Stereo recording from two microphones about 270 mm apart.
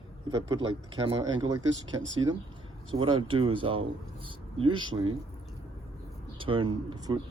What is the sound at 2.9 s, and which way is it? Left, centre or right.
Speech, centre.